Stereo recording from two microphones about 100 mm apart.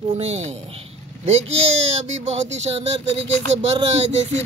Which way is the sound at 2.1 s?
90° right.